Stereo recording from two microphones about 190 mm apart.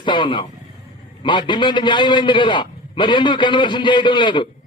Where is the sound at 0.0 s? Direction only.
25° left (ahead or behind).